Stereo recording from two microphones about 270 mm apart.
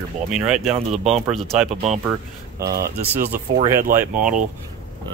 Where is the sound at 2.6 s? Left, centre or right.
Right.